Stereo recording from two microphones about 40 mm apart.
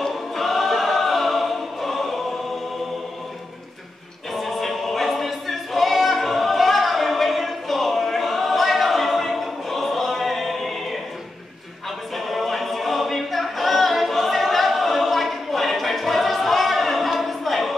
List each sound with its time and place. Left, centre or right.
0.0 s choir: centre
4.3 s choir: centre
12.2 s a capella: centre